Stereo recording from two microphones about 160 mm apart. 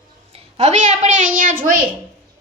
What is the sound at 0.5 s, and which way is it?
A woman's voice, 45° right (ahead or behind).